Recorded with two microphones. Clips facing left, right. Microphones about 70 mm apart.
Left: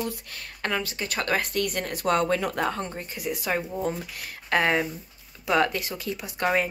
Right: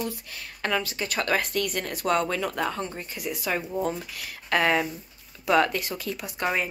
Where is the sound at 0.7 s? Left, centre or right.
Left.